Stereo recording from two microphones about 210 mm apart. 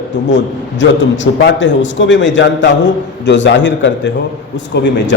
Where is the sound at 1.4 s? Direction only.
60° left (ahead or behind).